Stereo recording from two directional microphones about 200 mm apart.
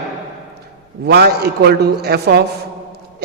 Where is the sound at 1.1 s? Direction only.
55° right (ahead or behind).